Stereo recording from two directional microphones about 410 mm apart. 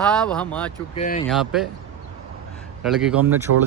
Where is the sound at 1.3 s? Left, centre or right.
Centre.